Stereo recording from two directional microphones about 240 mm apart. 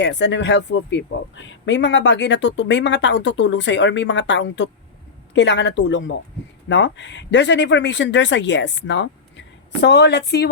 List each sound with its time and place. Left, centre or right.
0.0 s speech: left